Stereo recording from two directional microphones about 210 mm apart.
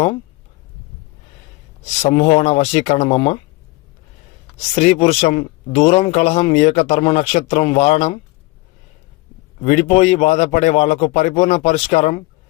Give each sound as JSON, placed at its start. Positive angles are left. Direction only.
{"t": 2.0, "sound": "a man's voice", "side_deg": 30}
{"t": 4.7, "sound": "speech", "side_deg": 30}
{"t": 9.6, "sound": "a man's voice", "side_deg": 30}